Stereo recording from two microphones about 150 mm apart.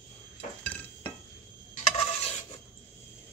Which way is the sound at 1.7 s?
45° left (ahead or behind).